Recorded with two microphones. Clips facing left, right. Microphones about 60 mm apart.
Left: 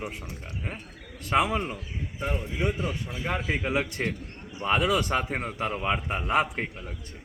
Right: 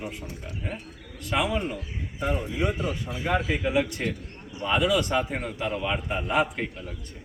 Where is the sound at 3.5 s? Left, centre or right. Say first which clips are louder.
Right 3 dB; left.